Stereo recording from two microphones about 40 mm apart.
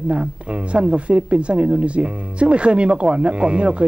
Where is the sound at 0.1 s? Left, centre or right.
Right.